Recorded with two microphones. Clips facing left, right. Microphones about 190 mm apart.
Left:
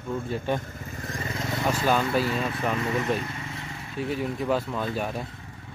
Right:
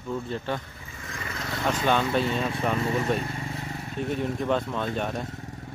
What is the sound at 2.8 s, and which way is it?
Speech, 30° right (ahead or behind).